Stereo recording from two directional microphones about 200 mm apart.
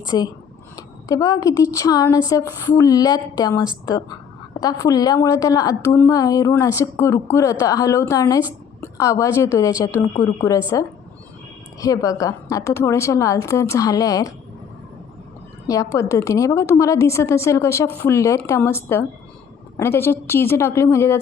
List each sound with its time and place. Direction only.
0.1 s a woman's voice: 20° left (ahead or behind)
15.6 s a woman's voice: 15° left (ahead or behind)